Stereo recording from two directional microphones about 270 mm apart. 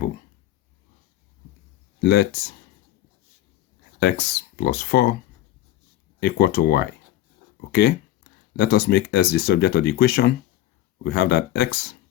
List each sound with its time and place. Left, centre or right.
2.0 s speech: left
4.0 s speech: left
6.1 s speech: left